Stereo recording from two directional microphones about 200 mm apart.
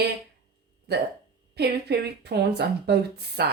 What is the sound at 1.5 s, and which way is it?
A woman's voice, 55° right (ahead or behind).